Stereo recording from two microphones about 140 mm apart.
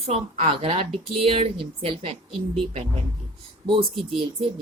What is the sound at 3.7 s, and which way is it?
Speech, 40° right (ahead or behind).